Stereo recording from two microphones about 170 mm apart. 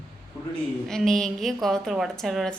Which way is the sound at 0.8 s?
Centre (ahead or behind).